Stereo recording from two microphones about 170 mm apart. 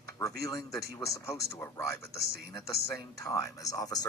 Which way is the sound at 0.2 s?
20° left (ahead or behind).